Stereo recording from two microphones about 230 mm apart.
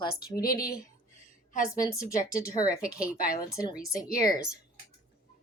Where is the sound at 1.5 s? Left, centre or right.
Left.